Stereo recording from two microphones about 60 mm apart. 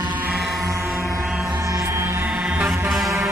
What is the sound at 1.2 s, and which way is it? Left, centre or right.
Music, centre.